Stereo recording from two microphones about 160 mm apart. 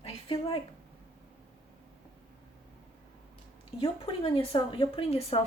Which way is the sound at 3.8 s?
35° left (ahead or behind).